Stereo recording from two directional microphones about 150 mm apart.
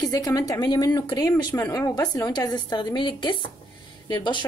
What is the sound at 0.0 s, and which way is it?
A woman's voice, 25° left (ahead or behind).